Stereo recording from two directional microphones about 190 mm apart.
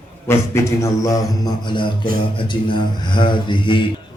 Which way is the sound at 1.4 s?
25° left (ahead or behind).